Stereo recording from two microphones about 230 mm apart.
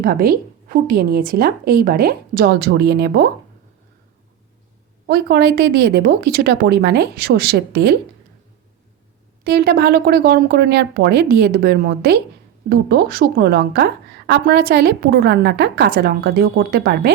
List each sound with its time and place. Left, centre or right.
0.0 s a woman's voice: right
5.0 s a woman's voice: right
9.4 s a woman's voice: right